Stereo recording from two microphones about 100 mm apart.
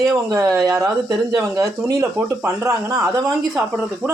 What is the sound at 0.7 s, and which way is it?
Speech, 30° right (ahead or behind).